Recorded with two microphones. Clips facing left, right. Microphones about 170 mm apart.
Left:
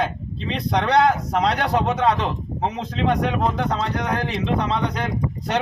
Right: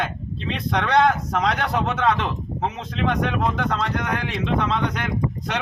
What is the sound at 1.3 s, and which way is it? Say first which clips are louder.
A man's voice: left 2 dB; 30° left (ahead or behind).